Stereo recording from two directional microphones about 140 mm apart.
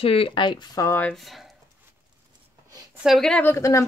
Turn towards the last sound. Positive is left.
turn(degrees=20)  # may be behind; listen again after turning